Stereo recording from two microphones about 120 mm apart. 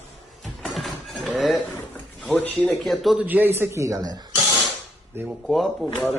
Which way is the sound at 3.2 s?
15° right (ahead or behind).